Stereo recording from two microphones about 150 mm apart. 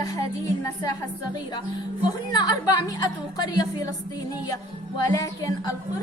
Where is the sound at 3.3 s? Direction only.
25° left (ahead or behind).